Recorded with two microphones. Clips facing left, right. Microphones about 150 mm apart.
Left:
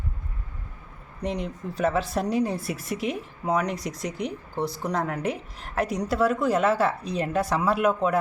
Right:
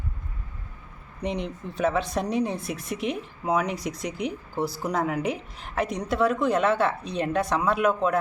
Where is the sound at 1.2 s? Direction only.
Centre (ahead or behind).